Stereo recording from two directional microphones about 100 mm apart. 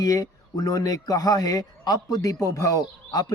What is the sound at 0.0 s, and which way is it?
A man's voice, 35° left (ahead or behind).